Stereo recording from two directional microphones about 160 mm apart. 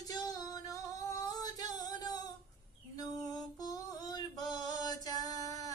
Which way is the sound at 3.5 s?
25° left (ahead or behind).